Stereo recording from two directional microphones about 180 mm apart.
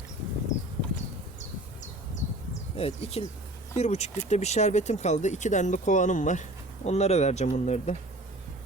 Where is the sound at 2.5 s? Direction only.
35° left (ahead or behind).